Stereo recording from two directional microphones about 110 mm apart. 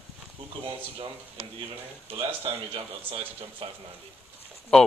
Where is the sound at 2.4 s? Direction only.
60° right (ahead or behind).